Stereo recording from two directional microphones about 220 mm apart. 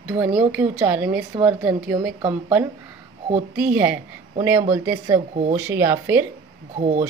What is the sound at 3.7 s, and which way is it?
Speech, 10° right (ahead or behind).